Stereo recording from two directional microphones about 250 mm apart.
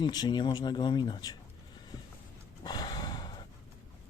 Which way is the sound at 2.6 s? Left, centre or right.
Centre.